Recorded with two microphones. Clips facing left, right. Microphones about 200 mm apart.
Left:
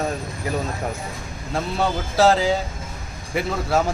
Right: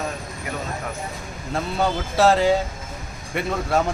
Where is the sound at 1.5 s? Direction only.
Centre (ahead or behind).